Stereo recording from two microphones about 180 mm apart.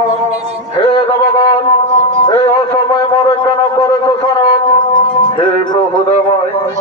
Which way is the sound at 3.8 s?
25° left (ahead or behind).